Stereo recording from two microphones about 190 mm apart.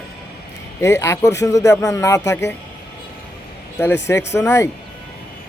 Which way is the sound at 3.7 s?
15° left (ahead or behind).